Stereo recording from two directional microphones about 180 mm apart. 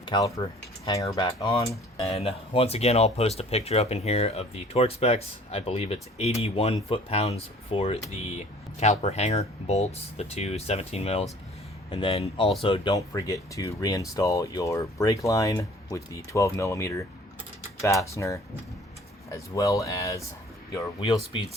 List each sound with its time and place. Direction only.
0.0 s speech: 20° left (ahead or behind)
2.0 s speech: 35° left (ahead or behind)